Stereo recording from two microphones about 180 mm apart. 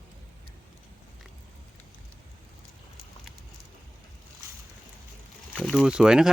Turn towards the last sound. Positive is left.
turn(degrees=-5)  # may be behind; listen again after turning